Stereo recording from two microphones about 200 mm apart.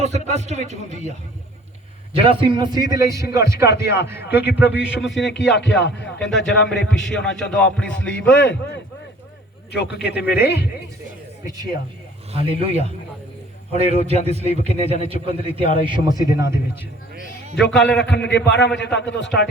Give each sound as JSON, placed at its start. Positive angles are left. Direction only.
{"t": 0.0, "sound": "speech", "side_deg": -35}
{"t": 2.1, "sound": "a man's voice", "side_deg": -25}
{"t": 5.2, "sound": "speech", "side_deg": 60}
{"t": 6.3, "sound": "a man's voice", "side_deg": 0}
{"t": 8.3, "sound": "speech", "side_deg": 60}
{"t": 9.7, "sound": "speech", "side_deg": 55}
{"t": 12.3, "sound": "a man's voice", "side_deg": -30}
{"t": 17.7, "sound": "a man's voice", "side_deg": 5}
{"t": 18.0, "sound": "speech", "side_deg": 60}